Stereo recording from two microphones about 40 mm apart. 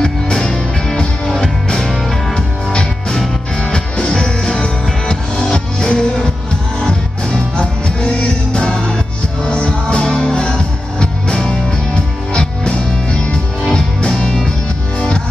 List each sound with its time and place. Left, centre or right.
0.0 s music: centre
3.6 s music: left
7.5 s music: left